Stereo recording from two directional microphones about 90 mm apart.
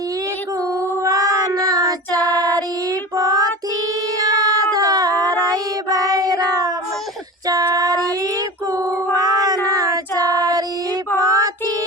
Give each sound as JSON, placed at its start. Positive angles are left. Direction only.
{"t": 1.0, "sound": "child singing", "side_deg": -40}
{"t": 4.2, "sound": "a sound", "side_deg": -45}
{"t": 7.4, "sound": "female singing", "side_deg": -45}
{"t": 9.6, "sound": "child singing", "side_deg": -40}